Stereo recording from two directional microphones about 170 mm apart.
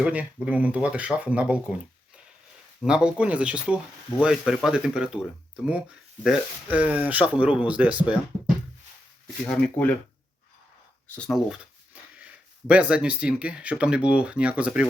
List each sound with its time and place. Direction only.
0.0 s speech: 5° right (ahead or behind)
2.8 s speech: 5° right (ahead or behind)
6.2 s speech: 5° right (ahead or behind)
9.4 s speech: 10° left (ahead or behind)
11.3 s speech: centre (ahead or behind)